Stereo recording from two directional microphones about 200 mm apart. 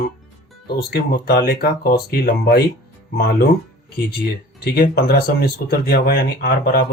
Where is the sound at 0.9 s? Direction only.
50° left (ahead or behind).